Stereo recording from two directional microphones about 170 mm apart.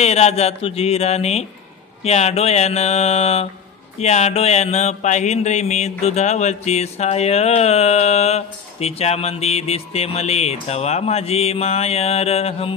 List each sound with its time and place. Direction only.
0.0 s mantra: 40° left (ahead or behind)